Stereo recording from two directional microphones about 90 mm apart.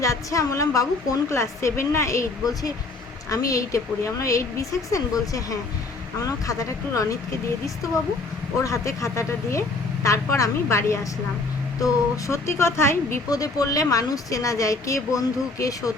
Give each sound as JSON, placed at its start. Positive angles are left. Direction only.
{"t": 0.0, "sound": "a woman's voice", "side_deg": 35}
{"t": 8.6, "sound": "a woman's voice", "side_deg": 35}
{"t": 13.3, "sound": "a woman's voice", "side_deg": 40}